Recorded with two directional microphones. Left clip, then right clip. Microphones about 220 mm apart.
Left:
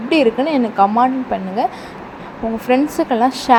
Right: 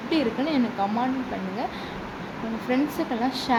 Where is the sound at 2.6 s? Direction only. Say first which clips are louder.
Left 10 dB; 30° left (ahead or behind).